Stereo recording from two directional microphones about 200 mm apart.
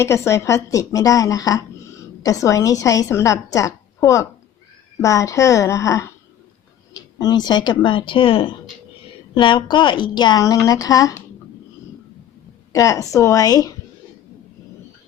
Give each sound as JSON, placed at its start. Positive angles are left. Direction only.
{"t": 0.0, "sound": "a woman's voice", "side_deg": 15}
{"t": 12.7, "sound": "a woman's voice", "side_deg": 15}